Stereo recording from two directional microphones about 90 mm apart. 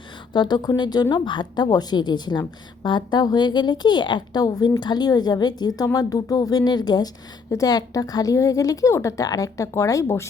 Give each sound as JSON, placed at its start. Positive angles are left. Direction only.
{"t": 0.3, "sound": "a woman's voice", "side_deg": 55}